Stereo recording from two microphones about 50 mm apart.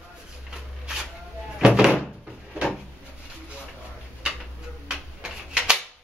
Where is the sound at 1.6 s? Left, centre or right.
Centre.